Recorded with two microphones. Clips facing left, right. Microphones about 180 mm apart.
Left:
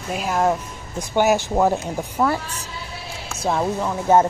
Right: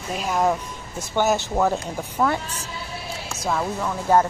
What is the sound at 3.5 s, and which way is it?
Speech, 25° left (ahead or behind).